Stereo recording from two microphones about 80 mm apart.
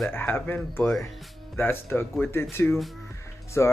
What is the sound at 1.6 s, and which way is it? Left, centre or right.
Speech, left.